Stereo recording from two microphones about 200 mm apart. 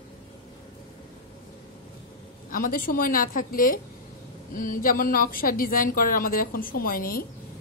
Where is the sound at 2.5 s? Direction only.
45° left (ahead or behind).